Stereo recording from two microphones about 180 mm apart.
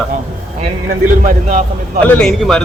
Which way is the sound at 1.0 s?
45° right (ahead or behind).